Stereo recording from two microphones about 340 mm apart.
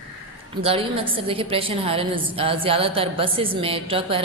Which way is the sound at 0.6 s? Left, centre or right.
Centre.